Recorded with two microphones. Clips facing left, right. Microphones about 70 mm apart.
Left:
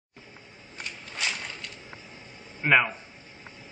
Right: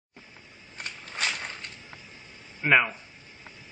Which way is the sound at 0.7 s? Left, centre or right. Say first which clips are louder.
Right 1 dB; right.